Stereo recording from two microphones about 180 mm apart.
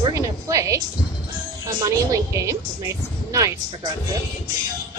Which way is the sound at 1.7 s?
20° right (ahead or behind).